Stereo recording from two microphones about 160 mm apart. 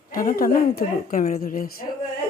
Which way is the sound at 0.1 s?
65° left (ahead or behind).